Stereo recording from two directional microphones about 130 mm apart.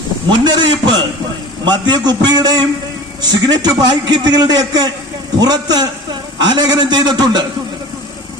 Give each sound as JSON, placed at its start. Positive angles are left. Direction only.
{"t": 0.4, "sound": "a man's voice", "side_deg": -35}